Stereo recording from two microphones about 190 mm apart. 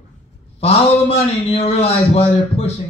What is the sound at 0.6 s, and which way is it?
A man's voice, 35° left (ahead or behind).